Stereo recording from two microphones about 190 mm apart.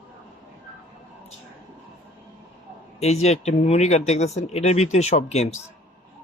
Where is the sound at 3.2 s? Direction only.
35° left (ahead or behind).